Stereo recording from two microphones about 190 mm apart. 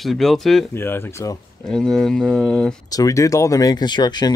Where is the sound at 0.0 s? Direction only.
Centre (ahead or behind).